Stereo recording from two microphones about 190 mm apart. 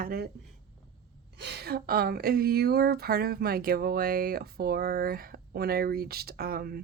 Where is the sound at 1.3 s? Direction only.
60° right (ahead or behind).